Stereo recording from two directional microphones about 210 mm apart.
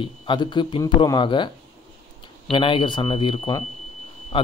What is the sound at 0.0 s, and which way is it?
Speech, 20° left (ahead or behind).